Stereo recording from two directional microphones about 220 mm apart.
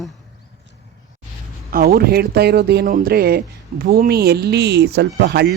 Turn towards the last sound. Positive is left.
turn(degrees=-45)  # may be behind; listen again after turning